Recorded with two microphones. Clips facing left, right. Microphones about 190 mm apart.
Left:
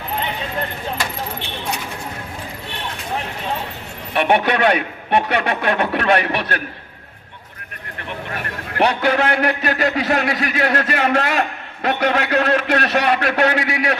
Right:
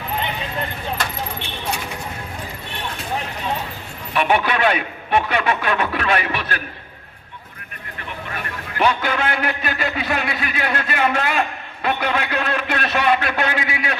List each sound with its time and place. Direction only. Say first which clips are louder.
4.1 s speech: left 2 dB; 60° left (ahead or behind)
8.8 s a man's voice: left 3 dB; 65° left (ahead or behind)